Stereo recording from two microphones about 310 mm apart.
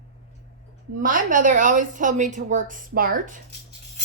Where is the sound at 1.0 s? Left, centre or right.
Right.